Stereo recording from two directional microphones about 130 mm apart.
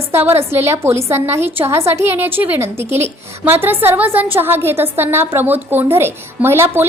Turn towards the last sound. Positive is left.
turn(degrees=-20)  # may be behind; listen again after turning